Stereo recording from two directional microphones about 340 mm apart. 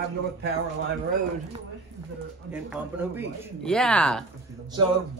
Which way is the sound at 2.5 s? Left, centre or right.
Centre.